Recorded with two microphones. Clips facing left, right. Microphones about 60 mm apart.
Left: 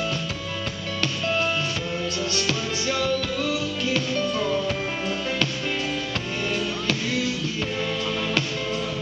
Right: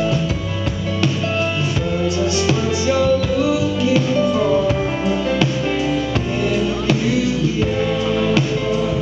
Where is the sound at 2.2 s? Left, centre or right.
Centre.